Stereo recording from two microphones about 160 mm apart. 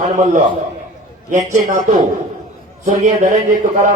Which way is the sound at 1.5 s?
55° right (ahead or behind).